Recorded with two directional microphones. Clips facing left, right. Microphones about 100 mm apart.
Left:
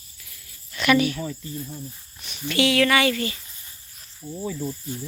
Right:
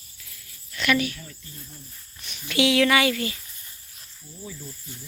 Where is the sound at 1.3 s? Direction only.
50° left (ahead or behind).